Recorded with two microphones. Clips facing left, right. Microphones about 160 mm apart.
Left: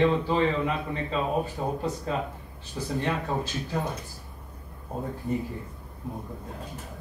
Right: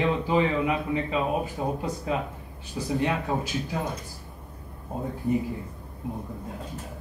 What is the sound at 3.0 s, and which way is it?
Speech, 10° right (ahead or behind).